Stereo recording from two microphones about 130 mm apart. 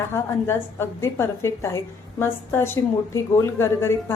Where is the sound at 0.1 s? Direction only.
20° left (ahead or behind).